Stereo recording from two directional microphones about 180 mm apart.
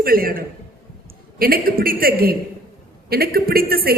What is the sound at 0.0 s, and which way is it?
A man's voice, 55° right (ahead or behind).